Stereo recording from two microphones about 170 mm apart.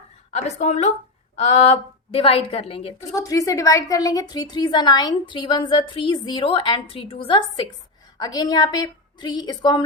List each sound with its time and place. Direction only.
0.3 s a woman's voice: 40° left (ahead or behind)
3.2 s a woman's voice: 20° left (ahead or behind)